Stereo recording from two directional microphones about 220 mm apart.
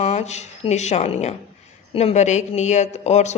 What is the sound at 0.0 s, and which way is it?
A woman's voice, 30° left (ahead or behind).